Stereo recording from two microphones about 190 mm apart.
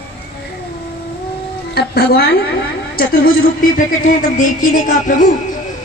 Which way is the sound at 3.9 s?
45° left (ahead or behind).